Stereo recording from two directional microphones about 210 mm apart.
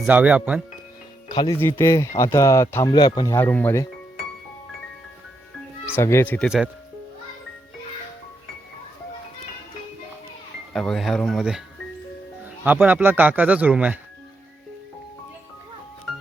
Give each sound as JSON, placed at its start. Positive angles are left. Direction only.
{"t": 0.0, "sound": "speech", "side_deg": -5}
{"t": 1.3, "sound": "speech", "side_deg": 20}
{"t": 5.8, "sound": "speech", "side_deg": 15}
{"t": 10.7, "sound": "speech", "side_deg": 5}
{"t": 12.6, "sound": "speech", "side_deg": -10}